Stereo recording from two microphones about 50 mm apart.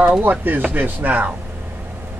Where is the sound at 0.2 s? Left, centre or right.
Right.